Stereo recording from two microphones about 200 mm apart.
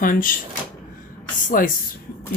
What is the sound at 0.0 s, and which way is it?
Speech, 45° left (ahead or behind).